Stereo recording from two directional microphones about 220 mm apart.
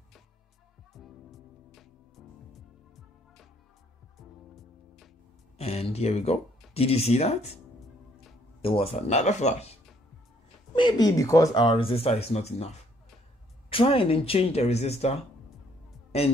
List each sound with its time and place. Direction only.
0.9 s music: centre (ahead or behind)
4.6 s music: centre (ahead or behind)
5.6 s speech: 30° left (ahead or behind)
8.6 s speech: 25° left (ahead or behind)
10.8 s speech: 20° left (ahead or behind)